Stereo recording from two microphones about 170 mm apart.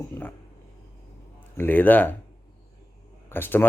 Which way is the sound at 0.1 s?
10° left (ahead or behind).